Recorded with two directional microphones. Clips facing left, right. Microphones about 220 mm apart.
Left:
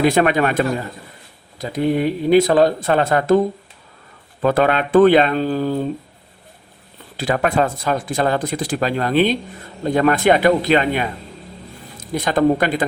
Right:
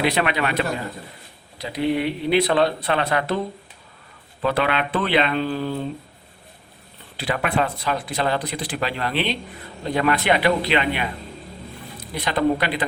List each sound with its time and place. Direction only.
0.0 s speech: 45° left (ahead or behind)
4.4 s speech: 45° left (ahead or behind)
7.2 s speech: 45° left (ahead or behind)